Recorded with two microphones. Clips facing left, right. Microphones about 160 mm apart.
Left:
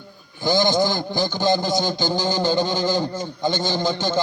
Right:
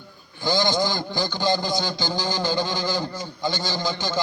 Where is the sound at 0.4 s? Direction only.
15° left (ahead or behind).